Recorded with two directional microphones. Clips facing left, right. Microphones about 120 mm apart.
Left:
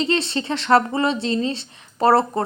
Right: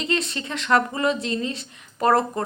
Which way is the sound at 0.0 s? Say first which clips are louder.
Left 4 dB; 30° left (ahead or behind).